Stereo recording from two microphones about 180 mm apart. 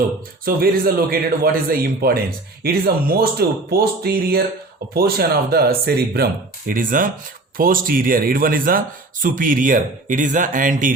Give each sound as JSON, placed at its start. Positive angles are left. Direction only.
{"t": 0.4, "sound": "speech", "side_deg": -55}
{"t": 6.7, "sound": "speech", "side_deg": -50}